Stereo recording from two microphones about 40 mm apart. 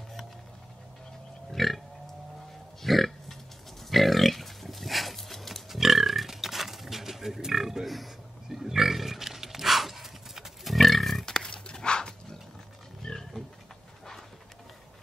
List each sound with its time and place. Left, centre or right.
1.5 s a sound: centre
2.8 s pig: centre
11.2 s pig: centre
13.0 s roaring cats: centre